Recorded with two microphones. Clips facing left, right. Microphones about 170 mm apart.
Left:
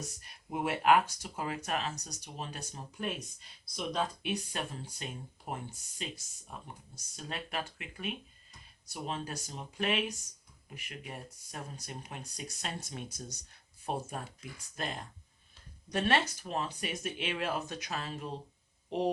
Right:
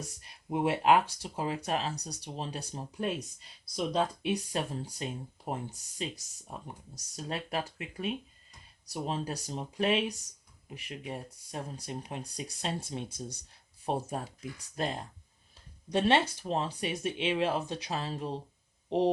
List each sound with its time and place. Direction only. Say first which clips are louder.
0.5 s speech: right 2 dB; 25° right (ahead or behind)